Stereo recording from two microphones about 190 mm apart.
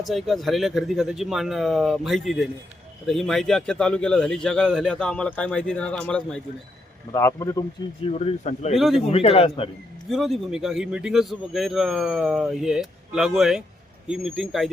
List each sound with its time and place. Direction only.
0.0 s speech: centre (ahead or behind)
7.1 s a man's voice: 15° left (ahead or behind)
8.0 s speech: 35° left (ahead or behind)
8.7 s speech: centre (ahead or behind)
9.0 s speech: 30° left (ahead or behind)
10.1 s speech: centre (ahead or behind)